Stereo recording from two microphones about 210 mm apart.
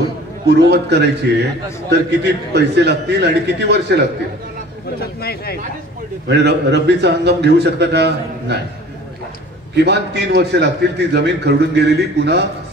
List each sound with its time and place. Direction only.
0.5 s a man's voice: 50° right (ahead or behind)
5.0 s speech: 50° left (ahead or behind)
6.2 s a man's voice: 55° right (ahead or behind)
9.8 s a man's voice: 55° right (ahead or behind)